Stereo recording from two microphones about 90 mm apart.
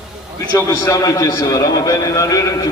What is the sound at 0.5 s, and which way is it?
A man's voice, 40° left (ahead or behind).